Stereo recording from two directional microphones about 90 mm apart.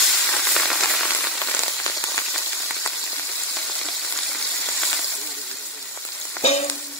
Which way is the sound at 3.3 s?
5° left (ahead or behind).